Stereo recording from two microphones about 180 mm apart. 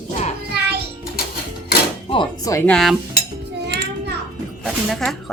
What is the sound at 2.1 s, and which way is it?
Music, 25° left (ahead or behind).